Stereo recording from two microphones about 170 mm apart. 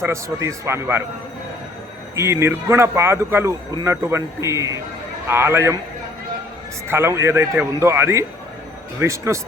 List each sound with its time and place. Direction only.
0.0 s speech: 15° right (ahead or behind)
2.1 s speech: 15° right (ahead or behind)
6.8 s speech: 15° right (ahead or behind)